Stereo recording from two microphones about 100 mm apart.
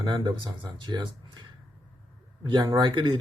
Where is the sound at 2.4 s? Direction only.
55° right (ahead or behind).